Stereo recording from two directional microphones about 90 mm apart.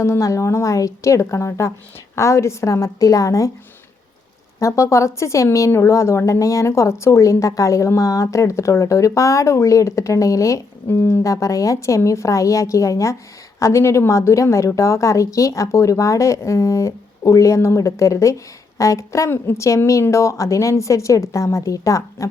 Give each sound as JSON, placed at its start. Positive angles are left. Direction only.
{"t": 0.0, "sound": "a woman's voice", "side_deg": 35}
{"t": 4.6, "sound": "a woman's voice", "side_deg": 35}
{"t": 11.2, "sound": "a woman's voice", "side_deg": 40}